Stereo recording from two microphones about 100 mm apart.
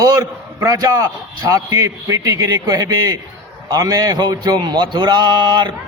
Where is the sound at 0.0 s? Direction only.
35° right (ahead or behind).